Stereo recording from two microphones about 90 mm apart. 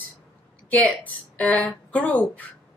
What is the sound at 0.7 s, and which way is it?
A woman's voice, 15° left (ahead or behind).